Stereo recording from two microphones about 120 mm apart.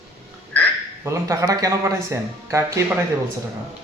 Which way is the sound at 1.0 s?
25° right (ahead or behind).